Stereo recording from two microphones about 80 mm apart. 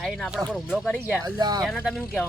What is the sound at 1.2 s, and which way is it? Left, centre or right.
Speech, right.